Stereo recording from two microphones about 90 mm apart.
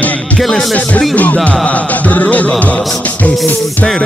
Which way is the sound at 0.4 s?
Centre (ahead or behind).